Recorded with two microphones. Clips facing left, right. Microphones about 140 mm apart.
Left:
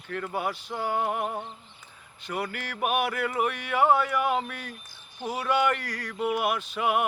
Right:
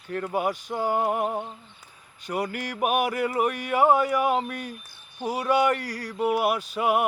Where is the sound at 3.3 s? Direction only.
40° right (ahead or behind).